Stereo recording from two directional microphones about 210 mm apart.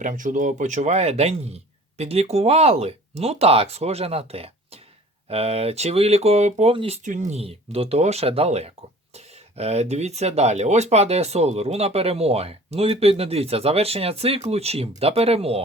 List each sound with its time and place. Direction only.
0.0 s speech: 40° right (ahead or behind)